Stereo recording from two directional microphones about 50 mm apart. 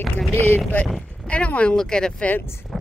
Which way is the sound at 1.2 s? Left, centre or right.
Left.